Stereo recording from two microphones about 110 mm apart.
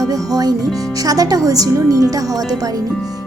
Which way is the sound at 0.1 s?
35° right (ahead or behind).